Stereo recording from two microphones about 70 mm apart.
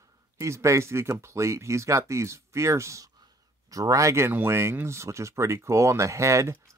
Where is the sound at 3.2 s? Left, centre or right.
Right.